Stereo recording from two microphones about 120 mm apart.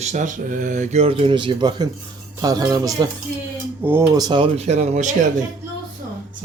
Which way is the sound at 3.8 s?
15° right (ahead or behind).